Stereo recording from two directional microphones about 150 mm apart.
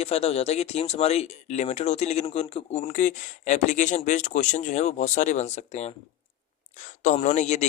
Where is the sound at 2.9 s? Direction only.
60° left (ahead or behind).